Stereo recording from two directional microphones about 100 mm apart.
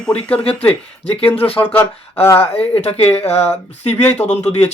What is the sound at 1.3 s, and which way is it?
Speech, 75° left (ahead or behind).